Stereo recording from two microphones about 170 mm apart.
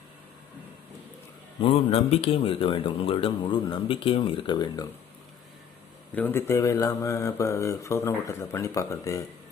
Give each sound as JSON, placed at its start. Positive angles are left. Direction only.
{"t": 1.6, "sound": "speech", "side_deg": 35}
{"t": 6.1, "sound": "speech", "side_deg": 10}